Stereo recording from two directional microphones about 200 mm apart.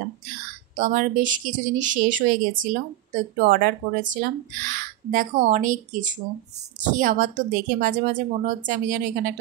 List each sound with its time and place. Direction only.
0.7 s speech: 40° right (ahead or behind)